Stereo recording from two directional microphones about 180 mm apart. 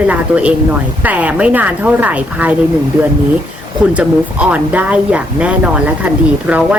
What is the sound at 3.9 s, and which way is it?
A woman's voice, 5° right (ahead or behind).